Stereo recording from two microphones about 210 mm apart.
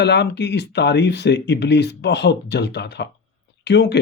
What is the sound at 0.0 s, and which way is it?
Speech, 55° left (ahead or behind).